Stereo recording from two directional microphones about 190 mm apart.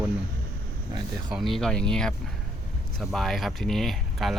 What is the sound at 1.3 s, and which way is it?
Speech, centre (ahead or behind).